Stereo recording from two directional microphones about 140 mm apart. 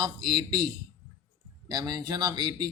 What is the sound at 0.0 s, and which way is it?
Speech, 30° right (ahead or behind).